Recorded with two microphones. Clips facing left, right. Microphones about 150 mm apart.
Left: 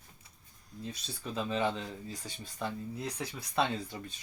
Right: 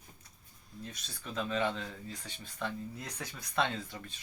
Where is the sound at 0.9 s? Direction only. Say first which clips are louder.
Left 3 dB; 30° left (ahead or behind).